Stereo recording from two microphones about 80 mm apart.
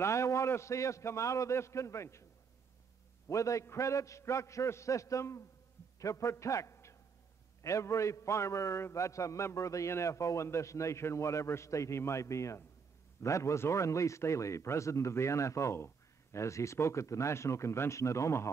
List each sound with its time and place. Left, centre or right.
0.0 s a man's voice: left
3.3 s a man's voice: left